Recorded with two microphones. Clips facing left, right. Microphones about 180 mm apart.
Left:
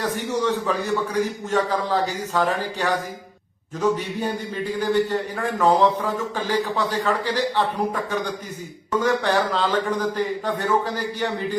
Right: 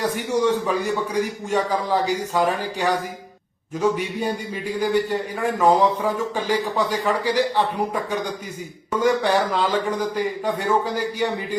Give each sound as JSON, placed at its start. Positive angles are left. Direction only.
{"t": 0.0, "sound": "a man's voice", "side_deg": -10}
{"t": 9.0, "sound": "a man's voice", "side_deg": -10}